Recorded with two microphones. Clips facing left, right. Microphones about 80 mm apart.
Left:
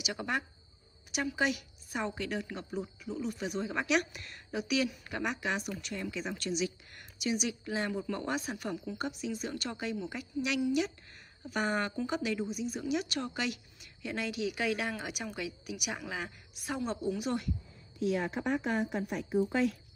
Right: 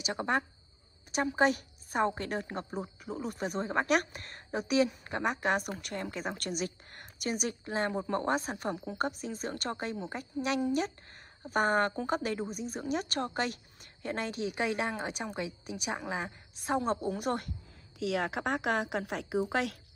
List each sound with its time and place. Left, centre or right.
0.0 s a woman's voice: right
17.9 s a woman's voice: right